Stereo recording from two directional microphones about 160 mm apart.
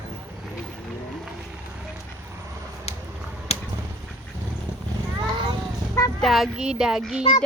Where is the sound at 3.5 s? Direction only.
40° left (ahead or behind).